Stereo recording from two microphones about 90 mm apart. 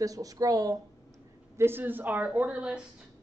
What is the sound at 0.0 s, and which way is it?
Speech, 40° right (ahead or behind).